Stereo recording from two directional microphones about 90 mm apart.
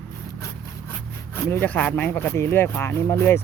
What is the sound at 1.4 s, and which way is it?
Speech, 25° left (ahead or behind).